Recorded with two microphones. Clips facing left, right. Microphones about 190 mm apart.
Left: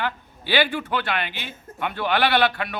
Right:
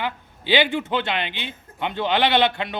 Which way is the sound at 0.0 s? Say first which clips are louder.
Even; 20° right (ahead or behind).